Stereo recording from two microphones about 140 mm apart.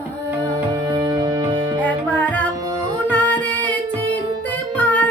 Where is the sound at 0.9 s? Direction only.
25° right (ahead or behind).